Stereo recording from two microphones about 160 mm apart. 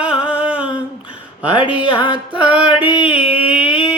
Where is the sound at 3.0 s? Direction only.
10° right (ahead or behind).